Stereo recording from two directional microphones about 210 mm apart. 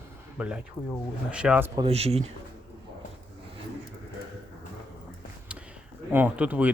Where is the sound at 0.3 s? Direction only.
5° right (ahead or behind).